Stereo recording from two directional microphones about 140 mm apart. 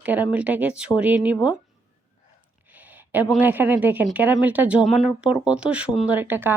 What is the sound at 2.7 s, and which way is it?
A woman's voice, 10° right (ahead or behind).